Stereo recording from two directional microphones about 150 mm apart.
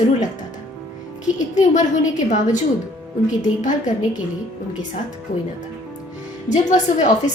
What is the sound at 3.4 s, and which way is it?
Speech, 55° left (ahead or behind).